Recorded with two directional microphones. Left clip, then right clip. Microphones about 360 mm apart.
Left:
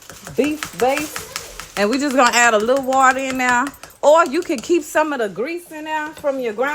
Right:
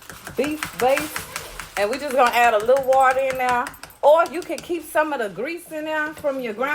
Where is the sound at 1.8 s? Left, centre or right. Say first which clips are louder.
Left 3 dB; left.